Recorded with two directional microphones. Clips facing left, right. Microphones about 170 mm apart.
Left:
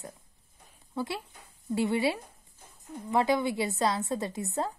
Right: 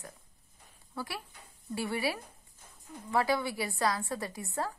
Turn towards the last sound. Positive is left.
turn(degrees=20)  # may be behind; listen again after turning